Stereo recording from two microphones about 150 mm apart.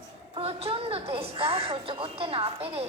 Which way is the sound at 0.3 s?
40° right (ahead or behind).